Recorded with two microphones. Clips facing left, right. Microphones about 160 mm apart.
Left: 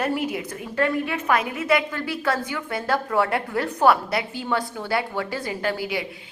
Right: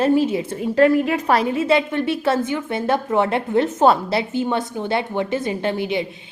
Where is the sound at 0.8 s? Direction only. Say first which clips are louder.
Right 8 dB; 40° right (ahead or behind).